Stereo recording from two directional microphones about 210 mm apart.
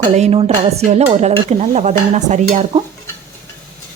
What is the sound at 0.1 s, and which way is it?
Speech, 30° right (ahead or behind).